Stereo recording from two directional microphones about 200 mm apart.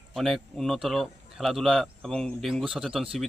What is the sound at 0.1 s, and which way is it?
A man's voice, centre (ahead or behind).